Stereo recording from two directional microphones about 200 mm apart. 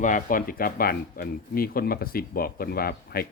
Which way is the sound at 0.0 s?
40° left (ahead or behind).